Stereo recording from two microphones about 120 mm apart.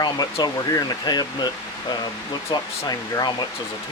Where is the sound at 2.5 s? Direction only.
35° left (ahead or behind).